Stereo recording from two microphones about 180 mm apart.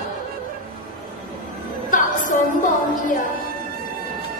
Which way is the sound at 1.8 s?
45° left (ahead or behind).